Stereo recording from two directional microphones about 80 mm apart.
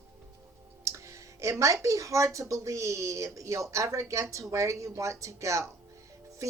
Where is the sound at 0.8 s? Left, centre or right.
Right.